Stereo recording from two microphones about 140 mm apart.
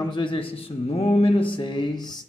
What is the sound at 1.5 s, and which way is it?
Speech, 35° left (ahead or behind).